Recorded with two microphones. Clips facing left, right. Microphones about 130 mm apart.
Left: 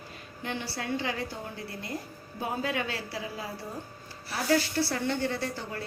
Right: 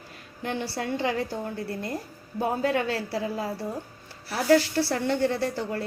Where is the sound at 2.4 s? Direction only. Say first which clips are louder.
Right 6 dB; 45° right (ahead or behind).